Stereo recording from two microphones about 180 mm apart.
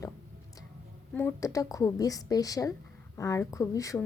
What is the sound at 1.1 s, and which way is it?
A woman's voice, 15° left (ahead or behind).